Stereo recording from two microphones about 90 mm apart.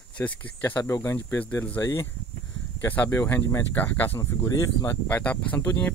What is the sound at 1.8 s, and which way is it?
Speech, 35° left (ahead or behind).